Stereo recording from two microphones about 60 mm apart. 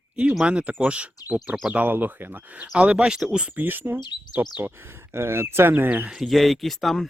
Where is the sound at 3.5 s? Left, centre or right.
Right.